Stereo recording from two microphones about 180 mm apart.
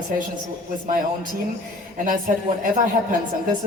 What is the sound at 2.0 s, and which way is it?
Speech, 50° right (ahead or behind).